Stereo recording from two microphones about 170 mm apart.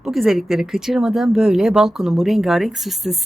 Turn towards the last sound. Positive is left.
turn(degrees=0)  # may be behind; listen again after turning